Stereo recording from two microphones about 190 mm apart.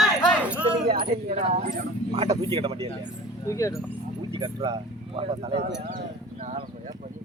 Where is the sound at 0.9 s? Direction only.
50° right (ahead or behind).